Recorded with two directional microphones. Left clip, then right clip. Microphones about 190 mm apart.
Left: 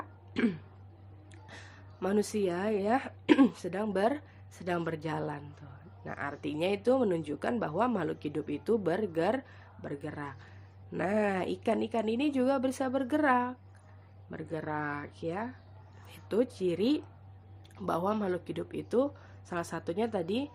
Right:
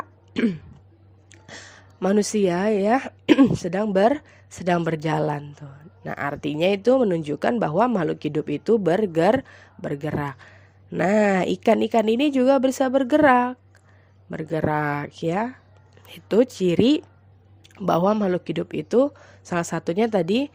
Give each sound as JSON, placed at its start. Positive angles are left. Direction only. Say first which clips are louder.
{"t": 0.3, "sound": "throat clearing", "louder": "right 7 dB", "side_deg": -30}
{"t": 1.3, "sound": "a woman's voice", "louder": "right 9 dB", "side_deg": -40}